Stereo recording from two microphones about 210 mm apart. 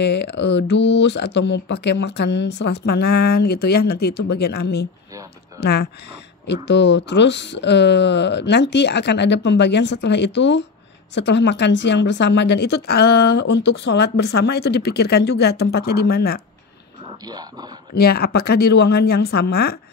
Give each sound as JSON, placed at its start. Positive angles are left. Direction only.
{"t": 0.0, "sound": "a woman's voice", "side_deg": 55}
{"t": 17.3, "sound": "speech", "side_deg": -20}
{"t": 17.9, "sound": "a woman's voice", "side_deg": 50}